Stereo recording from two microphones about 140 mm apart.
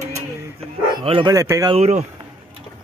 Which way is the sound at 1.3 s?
25° right (ahead or behind).